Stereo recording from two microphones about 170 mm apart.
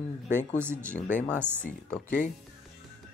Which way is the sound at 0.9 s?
45° left (ahead or behind).